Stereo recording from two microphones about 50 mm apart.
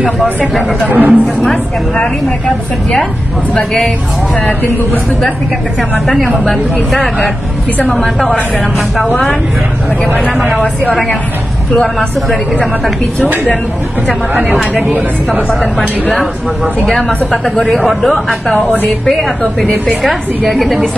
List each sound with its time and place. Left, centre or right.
0.8 s speech: right
1.2 s a man's voice: centre
5.8 s a man's voice: centre
7.9 s a woman's voice: centre
10.6 s a woman's voice: centre
17.6 s a man's voice: centre
20.0 s a man's voice: centre